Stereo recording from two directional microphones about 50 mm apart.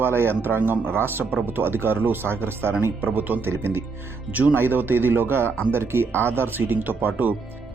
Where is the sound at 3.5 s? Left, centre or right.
Right.